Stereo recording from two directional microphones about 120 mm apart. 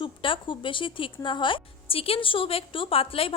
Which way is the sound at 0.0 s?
45° left (ahead or behind).